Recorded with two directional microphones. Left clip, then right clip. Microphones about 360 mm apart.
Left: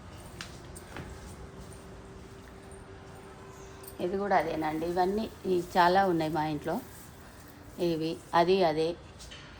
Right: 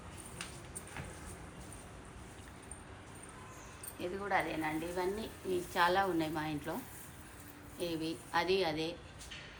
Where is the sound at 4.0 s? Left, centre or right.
Left.